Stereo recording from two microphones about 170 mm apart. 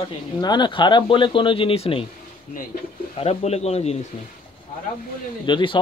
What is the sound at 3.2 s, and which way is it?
Speech, 35° left (ahead or behind).